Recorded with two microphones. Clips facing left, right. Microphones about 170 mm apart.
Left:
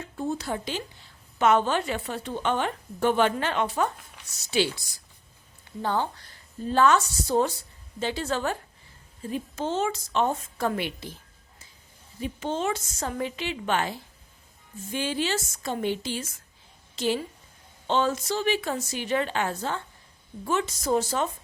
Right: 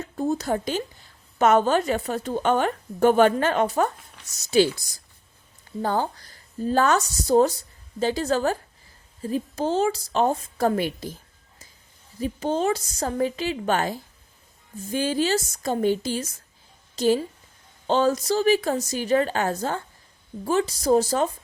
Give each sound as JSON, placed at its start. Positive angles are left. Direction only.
{"t": 0.0, "sound": "a sound", "side_deg": -40}
{"t": 1.4, "sound": "a woman's voice", "side_deg": -45}
{"t": 12.2, "sound": "a woman's voice", "side_deg": -40}